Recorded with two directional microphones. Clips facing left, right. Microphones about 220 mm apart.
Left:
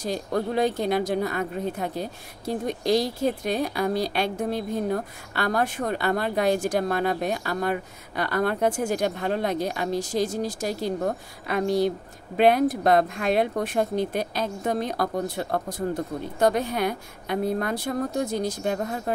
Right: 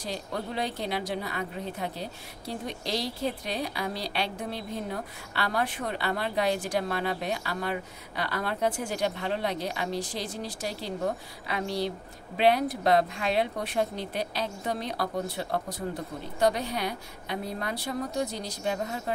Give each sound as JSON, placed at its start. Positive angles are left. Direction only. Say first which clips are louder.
{"t": 0.0, "sound": "a woman's voice", "louder": "left 8 dB", "side_deg": 45}